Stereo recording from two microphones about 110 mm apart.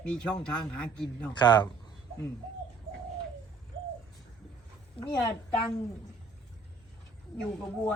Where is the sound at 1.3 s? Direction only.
40° left (ahead or behind).